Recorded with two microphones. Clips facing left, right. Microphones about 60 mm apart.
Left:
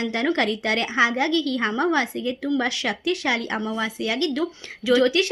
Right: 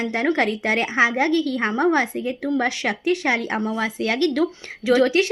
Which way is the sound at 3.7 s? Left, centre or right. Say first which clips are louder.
Right 3 dB; right.